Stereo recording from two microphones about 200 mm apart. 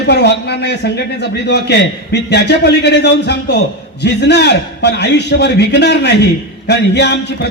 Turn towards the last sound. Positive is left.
turn(degrees=55)  # may be behind; listen again after turning